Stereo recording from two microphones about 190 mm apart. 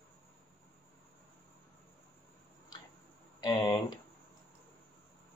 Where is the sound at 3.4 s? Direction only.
20° left (ahead or behind).